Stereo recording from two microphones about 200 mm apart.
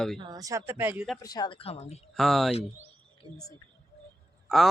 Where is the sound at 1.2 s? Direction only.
20° left (ahead or behind).